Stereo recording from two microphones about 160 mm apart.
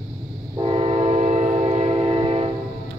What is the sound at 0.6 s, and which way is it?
Train, 40° right (ahead or behind).